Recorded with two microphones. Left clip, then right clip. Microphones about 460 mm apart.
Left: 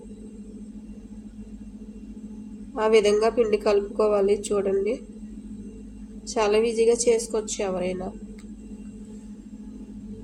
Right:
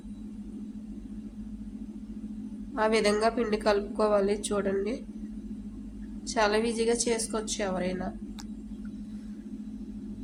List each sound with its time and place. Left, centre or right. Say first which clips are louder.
2.7 s a woman's voice: left 6 dB; right
6.2 s a woman's voice: left 4 dB; right